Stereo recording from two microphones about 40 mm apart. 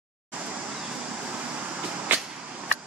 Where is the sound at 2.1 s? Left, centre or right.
Right.